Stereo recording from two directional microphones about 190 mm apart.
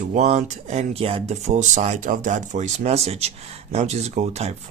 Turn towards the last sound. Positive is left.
turn(degrees=-35)  # may be behind; listen again after turning